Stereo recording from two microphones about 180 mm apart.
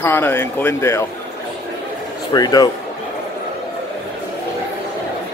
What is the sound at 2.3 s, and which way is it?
Speech, 20° left (ahead or behind).